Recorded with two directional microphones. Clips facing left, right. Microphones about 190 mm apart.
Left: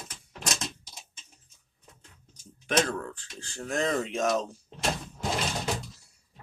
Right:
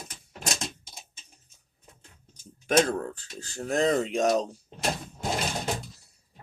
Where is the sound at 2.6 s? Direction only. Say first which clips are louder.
Right 4 dB; 45° right (ahead or behind).